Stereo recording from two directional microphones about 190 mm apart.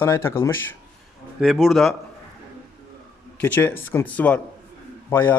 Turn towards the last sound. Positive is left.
turn(degrees=10)  # may be behind; listen again after turning